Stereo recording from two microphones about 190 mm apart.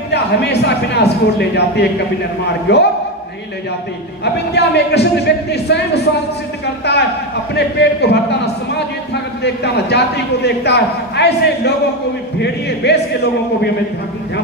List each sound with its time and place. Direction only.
0.1 s a man's voice: 60° left (ahead or behind)
4.2 s a man's voice: 60° left (ahead or behind)